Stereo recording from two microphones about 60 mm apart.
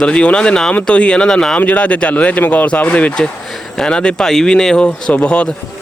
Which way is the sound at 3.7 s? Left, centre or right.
Centre.